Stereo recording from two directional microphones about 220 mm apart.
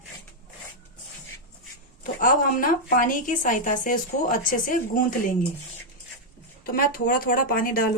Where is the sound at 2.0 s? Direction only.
40° left (ahead or behind).